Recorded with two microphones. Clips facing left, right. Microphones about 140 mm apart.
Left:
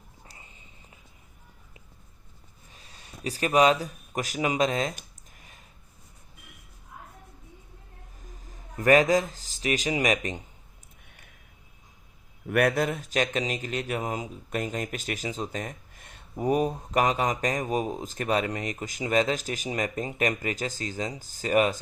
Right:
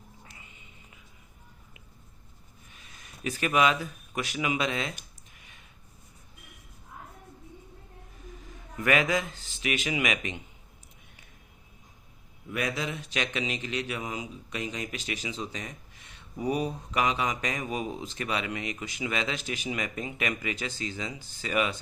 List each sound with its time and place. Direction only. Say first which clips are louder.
0.3 s whispering: left 1 dB; 35° left (ahead or behind)
2.6 s speech: left 3 dB; 35° left (ahead or behind)
5.4 s a sound: left 3 dB; 40° left (ahead or behind)
8.4 s a man's voice: left 1 dB; 40° left (ahead or behind)
12.5 s speech: left 8 dB; 65° left (ahead or behind); by 21.8 s 45° left (ahead or behind)